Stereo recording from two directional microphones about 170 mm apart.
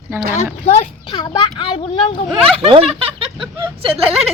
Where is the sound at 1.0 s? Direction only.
25° left (ahead or behind).